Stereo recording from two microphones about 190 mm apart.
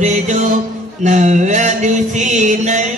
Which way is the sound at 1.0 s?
40° right (ahead or behind).